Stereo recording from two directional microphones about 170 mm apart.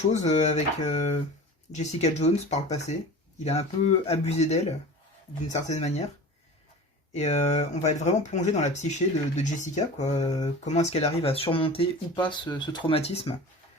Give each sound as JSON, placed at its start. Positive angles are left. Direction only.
{"t": 0.1, "sound": "speech", "side_deg": 40}
{"t": 7.1, "sound": "speech", "side_deg": 40}